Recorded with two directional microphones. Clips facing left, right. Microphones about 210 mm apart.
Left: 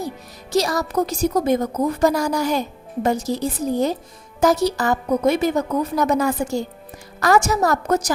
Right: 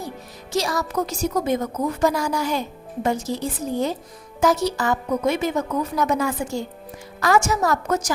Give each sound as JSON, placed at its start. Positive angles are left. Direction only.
{"t": 0.5, "sound": "a woman's voice", "side_deg": 40}